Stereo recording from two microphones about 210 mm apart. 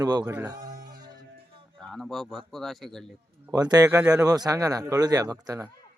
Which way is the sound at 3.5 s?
20° right (ahead or behind).